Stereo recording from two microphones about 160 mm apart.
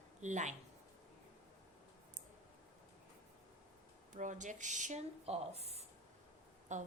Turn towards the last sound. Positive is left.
turn(degrees=-50)  # may be behind; listen again after turning